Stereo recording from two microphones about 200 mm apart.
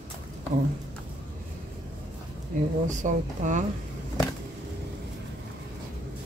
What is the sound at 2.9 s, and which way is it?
Speech, 40° right (ahead or behind).